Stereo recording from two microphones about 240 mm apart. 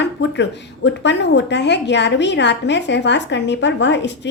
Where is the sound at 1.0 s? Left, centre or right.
Left.